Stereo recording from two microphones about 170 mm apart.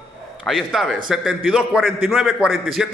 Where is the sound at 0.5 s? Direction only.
Centre (ahead or behind).